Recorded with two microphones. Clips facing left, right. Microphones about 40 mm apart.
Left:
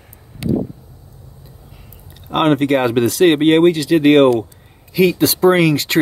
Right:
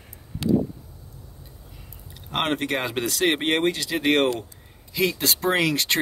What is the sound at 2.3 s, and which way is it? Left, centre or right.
Speech, centre.